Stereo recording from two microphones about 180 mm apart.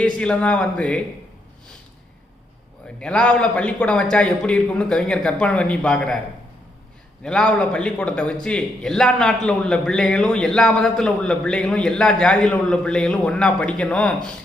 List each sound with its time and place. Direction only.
0.2 s a man's voice: 5° left (ahead or behind)
3.0 s a man's voice: 5° left (ahead or behind)
7.2 s a man's voice: 5° left (ahead or behind)